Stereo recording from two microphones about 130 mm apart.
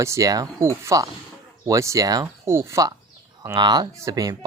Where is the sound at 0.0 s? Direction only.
25° right (ahead or behind).